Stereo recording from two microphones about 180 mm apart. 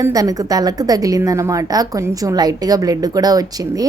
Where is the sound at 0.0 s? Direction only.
20° right (ahead or behind).